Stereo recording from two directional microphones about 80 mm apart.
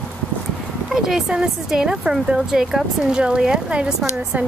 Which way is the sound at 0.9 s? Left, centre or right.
Centre.